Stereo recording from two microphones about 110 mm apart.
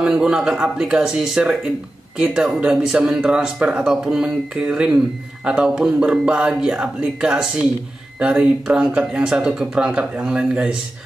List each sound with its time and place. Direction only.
0.0 s speech: 10° right (ahead or behind)